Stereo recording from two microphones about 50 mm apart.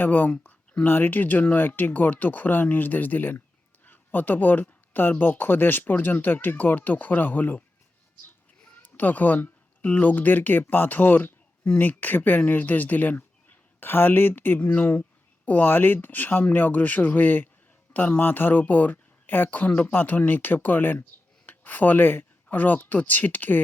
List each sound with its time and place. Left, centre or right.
0.0 s speech: left
0.3 s speech: left
0.9 s speech: left
8.8 s speech: left